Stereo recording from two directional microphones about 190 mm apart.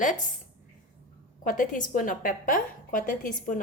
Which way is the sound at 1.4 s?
45° left (ahead or behind).